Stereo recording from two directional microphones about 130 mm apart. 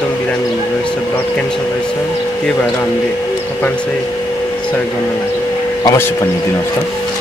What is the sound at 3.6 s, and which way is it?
Speech, 15° left (ahead or behind).